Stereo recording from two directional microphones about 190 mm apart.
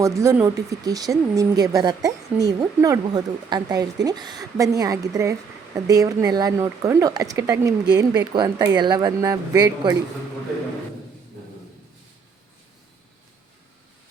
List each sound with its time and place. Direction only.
0.2 s speech: 15° right (ahead or behind)